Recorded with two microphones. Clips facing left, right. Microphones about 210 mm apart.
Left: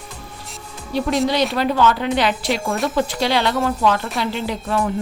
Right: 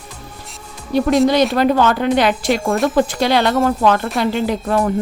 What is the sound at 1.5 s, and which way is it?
Speech, 50° right (ahead or behind).